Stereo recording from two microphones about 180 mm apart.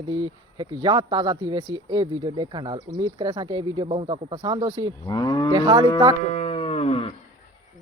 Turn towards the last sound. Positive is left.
turn(degrees=30)  # may be behind; listen again after turning